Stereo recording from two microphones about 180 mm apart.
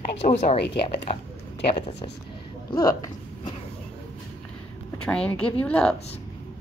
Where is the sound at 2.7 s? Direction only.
25° left (ahead or behind).